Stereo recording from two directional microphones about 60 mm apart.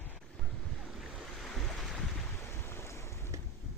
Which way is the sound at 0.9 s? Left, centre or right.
Centre.